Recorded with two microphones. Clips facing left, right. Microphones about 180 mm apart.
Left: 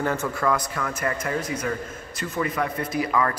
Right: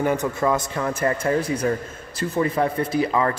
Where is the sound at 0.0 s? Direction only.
15° right (ahead or behind).